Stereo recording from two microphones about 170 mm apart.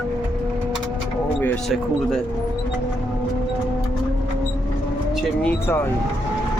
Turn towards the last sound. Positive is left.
turn(degrees=15)  # may be behind; listen again after turning